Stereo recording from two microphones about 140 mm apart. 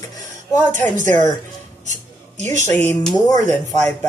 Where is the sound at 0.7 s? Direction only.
65° right (ahead or behind).